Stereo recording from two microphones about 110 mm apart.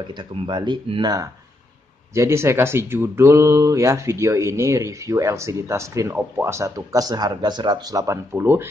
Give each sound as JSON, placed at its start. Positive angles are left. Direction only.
{"t": 0.0, "sound": "speech", "side_deg": -45}
{"t": 1.0, "sound": "speech", "side_deg": -35}